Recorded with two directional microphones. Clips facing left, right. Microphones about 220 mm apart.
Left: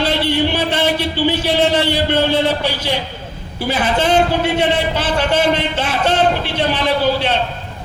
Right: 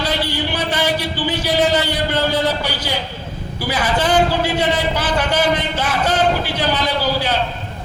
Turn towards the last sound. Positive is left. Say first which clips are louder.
# left 3 dB
turn(degrees=25)  # may be behind; listen again after turning